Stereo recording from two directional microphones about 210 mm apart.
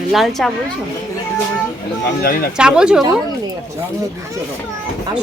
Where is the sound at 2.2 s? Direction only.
45° left (ahead or behind).